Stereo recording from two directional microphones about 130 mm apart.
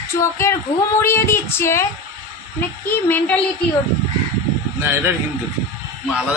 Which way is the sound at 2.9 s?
15° left (ahead or behind).